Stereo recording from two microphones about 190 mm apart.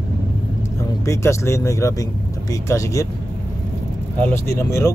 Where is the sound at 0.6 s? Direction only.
15° left (ahead or behind).